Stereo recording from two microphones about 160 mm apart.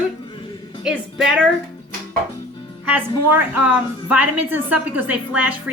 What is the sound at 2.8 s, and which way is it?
A woman's voice, 10° right (ahead or behind).